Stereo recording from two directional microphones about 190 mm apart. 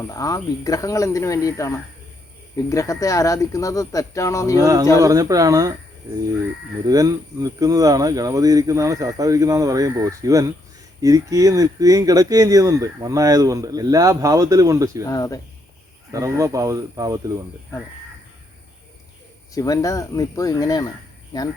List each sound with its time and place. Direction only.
0.0 s speech: 20° left (ahead or behind)
4.5 s speech: 20° right (ahead or behind)
6.8 s speech: 20° right (ahead or behind)
15.0 s speech: 15° left (ahead or behind)
16.1 s speech: 15° right (ahead or behind)
19.5 s speech: 20° left (ahead or behind)